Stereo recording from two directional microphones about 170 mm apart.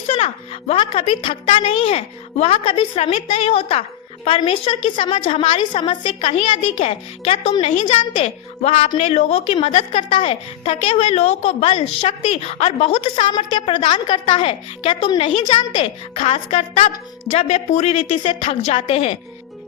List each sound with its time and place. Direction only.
0.7 s a woman's voice: 35° left (ahead or behind)